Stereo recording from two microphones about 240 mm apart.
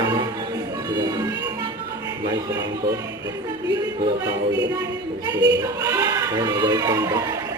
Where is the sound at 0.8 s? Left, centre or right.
Centre.